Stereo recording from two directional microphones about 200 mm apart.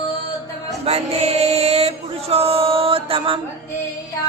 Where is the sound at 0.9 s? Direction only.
30° right (ahead or behind).